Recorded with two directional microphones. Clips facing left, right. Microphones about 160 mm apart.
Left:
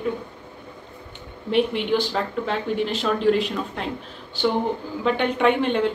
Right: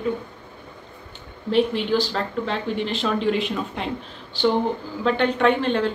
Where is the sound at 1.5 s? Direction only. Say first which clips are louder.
Right 1 dB; 60° left (ahead or behind).